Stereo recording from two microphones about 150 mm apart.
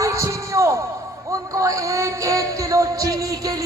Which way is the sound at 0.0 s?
20° right (ahead or behind).